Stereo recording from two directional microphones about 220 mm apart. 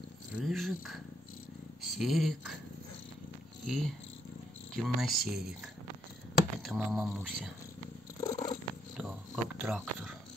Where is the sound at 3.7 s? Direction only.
Centre (ahead or behind).